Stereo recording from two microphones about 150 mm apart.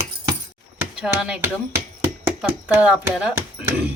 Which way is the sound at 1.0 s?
5° right (ahead or behind).